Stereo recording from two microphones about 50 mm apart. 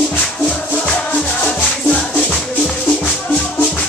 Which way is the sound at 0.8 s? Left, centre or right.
Centre.